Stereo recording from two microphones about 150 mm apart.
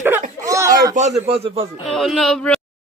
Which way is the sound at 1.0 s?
50° right (ahead or behind).